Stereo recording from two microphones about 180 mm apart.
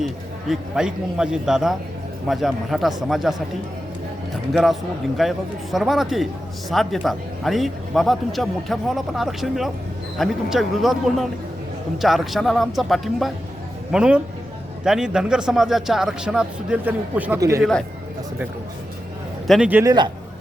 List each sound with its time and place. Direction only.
0.0 s speech: centre (ahead or behind)
4.5 s speech: centre (ahead or behind)
17.6 s speech: 5° left (ahead or behind)
19.5 s speech: 5° right (ahead or behind)
19.8 s a man's voice: 20° right (ahead or behind)